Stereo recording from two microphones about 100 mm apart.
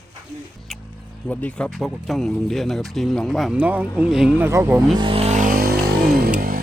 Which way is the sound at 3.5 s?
15° right (ahead or behind).